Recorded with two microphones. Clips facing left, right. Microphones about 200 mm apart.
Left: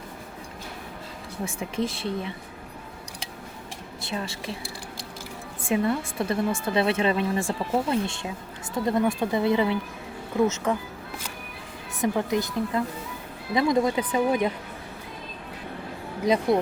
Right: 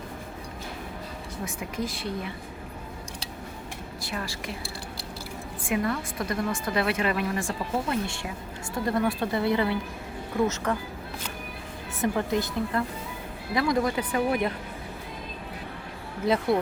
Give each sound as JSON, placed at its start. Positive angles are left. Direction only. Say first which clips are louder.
{"t": 1.5, "sound": "a woman's voice", "louder": "left 4 dB", "side_deg": 25}
{"t": 4.0, "sound": "a woman's voice", "louder": "left 3 dB", "side_deg": 25}
{"t": 11.9, "sound": "a woman's voice", "louder": "left 1 dB", "side_deg": 15}
{"t": 16.2, "sound": "speech", "louder": "left 2 dB", "side_deg": 15}